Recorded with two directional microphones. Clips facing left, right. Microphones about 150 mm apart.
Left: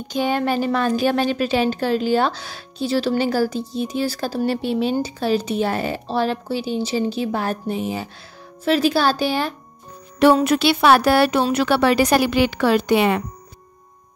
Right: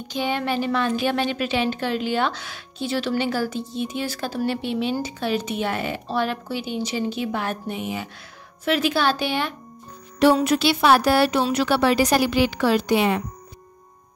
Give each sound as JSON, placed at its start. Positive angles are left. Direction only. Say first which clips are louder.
{"t": 0.1, "sound": "a woman's voice", "louder": "left 4 dB", "side_deg": 45}
{"t": 10.1, "sound": "a woman's voice", "louder": "left 3 dB", "side_deg": 55}